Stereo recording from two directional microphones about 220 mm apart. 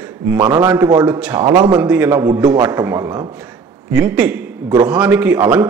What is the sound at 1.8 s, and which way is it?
Speech, 5° right (ahead or behind).